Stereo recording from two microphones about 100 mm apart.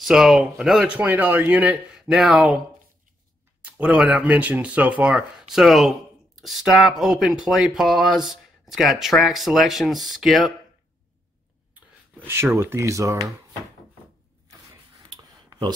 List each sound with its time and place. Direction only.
0.0 s speech: 5° right (ahead or behind)
0.8 s speech: 15° right (ahead or behind)
2.0 s speech: 5° right (ahead or behind)
3.6 s speech: 15° right (ahead or behind)
12.3 s speech: 25° right (ahead or behind)